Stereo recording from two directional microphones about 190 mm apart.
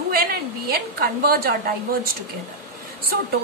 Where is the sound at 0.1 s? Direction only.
55° right (ahead or behind).